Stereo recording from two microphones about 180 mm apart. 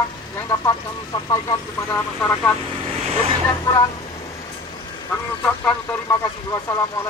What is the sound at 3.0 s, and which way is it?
Speech, 35° right (ahead or behind).